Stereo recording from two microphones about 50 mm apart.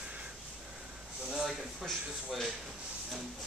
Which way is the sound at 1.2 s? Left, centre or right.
Centre.